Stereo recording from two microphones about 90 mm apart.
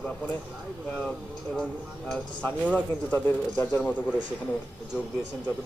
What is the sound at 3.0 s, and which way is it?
Speech, 25° left (ahead or behind).